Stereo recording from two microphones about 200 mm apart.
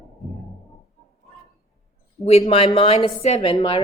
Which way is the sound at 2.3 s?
30° left (ahead or behind).